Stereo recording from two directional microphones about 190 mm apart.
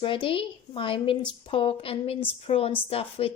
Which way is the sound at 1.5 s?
30° left (ahead or behind).